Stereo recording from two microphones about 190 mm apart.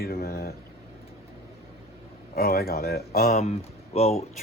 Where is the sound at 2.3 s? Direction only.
50° left (ahead or behind).